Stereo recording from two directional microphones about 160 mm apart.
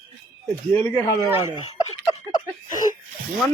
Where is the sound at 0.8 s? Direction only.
15° left (ahead or behind).